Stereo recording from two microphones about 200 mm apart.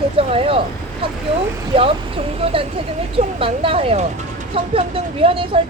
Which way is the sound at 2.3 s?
30° right (ahead or behind).